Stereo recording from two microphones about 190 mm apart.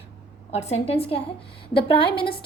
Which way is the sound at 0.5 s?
30° left (ahead or behind).